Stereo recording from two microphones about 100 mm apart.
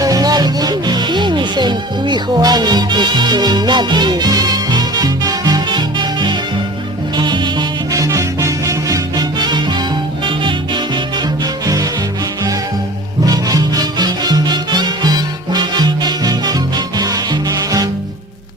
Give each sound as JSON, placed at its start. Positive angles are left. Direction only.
{"t": 0.0, "sound": "music", "side_deg": -40}
{"t": 7.9, "sound": "music", "side_deg": -35}
{"t": 11.6, "sound": "music", "side_deg": -35}
{"t": 13.2, "sound": "music", "side_deg": -40}